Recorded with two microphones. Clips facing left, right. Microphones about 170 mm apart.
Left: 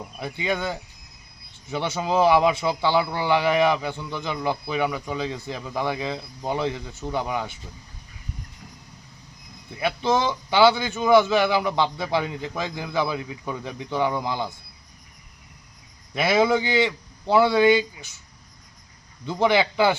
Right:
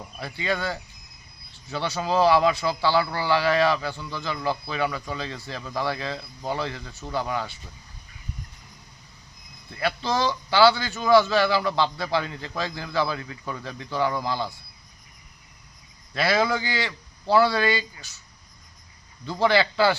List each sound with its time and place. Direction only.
0.2 s a man's voice: 20° left (ahead or behind)
9.6 s speech: 15° left (ahead or behind)
16.1 s a man's voice: 20° left (ahead or behind)
19.2 s a man's voice: 20° left (ahead or behind)